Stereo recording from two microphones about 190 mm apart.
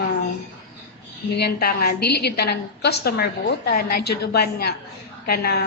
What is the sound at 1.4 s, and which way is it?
A woman's voice, 55° left (ahead or behind).